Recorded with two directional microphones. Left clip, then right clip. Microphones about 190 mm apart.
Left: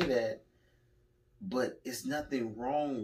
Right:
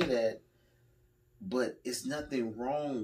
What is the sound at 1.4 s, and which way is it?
Speech, 25° right (ahead or behind).